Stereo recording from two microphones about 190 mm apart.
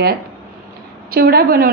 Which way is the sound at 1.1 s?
55° right (ahead or behind).